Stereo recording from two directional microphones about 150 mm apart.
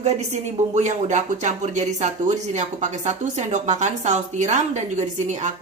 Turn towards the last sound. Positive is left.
turn(degrees=-50)  # may be behind; listen again after turning